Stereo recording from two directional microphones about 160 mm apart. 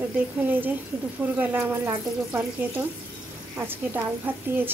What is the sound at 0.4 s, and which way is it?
Speech, 10° right (ahead or behind).